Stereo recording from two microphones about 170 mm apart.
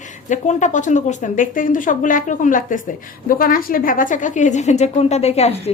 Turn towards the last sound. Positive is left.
turn(degrees=35)  # may be behind; listen again after turning